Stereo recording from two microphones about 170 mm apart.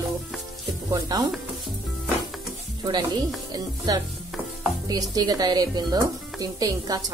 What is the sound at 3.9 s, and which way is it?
Speech, 25° right (ahead or behind).